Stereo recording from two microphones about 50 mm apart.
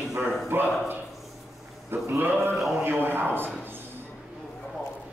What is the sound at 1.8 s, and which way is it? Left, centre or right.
A man's voice, right.